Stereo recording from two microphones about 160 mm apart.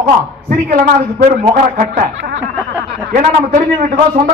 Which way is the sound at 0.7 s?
55° right (ahead or behind).